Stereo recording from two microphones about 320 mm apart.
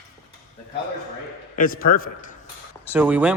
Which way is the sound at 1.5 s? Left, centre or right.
Left.